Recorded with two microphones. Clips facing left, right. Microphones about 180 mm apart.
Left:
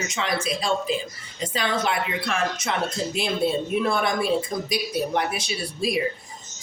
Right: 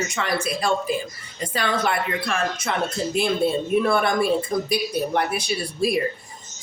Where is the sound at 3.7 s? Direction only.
55° right (ahead or behind).